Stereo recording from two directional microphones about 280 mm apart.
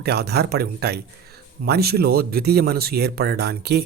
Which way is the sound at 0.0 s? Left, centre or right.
Right.